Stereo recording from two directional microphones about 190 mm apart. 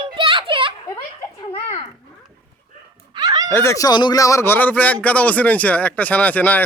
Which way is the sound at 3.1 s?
20° right (ahead or behind).